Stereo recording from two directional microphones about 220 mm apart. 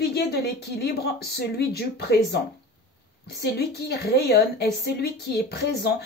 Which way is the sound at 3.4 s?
45° left (ahead or behind).